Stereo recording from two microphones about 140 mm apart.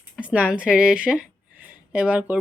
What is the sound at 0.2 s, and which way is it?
Speech, 10° right (ahead or behind).